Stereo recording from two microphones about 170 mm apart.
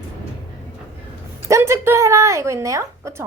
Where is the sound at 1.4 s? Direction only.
15° right (ahead or behind).